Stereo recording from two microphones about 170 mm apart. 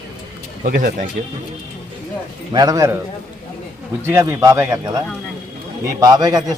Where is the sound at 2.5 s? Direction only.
20° right (ahead or behind).